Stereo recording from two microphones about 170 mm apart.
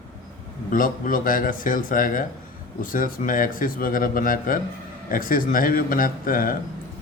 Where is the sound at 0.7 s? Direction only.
55° left (ahead or behind).